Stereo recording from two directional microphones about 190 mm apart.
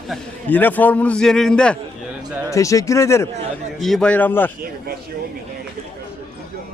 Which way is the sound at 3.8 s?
5° left (ahead or behind).